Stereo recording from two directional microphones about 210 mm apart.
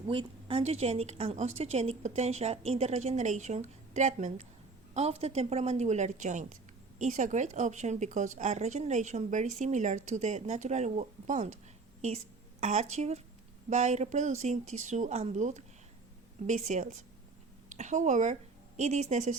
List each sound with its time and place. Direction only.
0.1 s a woman's voice: 25° right (ahead or behind)